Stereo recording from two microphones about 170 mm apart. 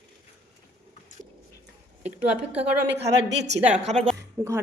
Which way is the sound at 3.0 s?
90° right.